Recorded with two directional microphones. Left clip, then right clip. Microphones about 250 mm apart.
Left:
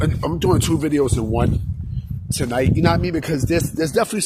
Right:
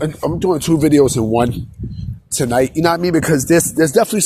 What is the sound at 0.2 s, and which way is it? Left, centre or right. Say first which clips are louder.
Speech: right 3 dB; centre.